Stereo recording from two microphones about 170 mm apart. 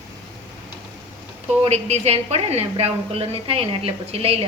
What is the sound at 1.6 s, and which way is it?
A woman's voice, 40° right (ahead or behind).